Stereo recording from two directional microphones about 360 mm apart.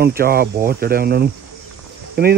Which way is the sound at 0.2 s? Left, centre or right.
Right.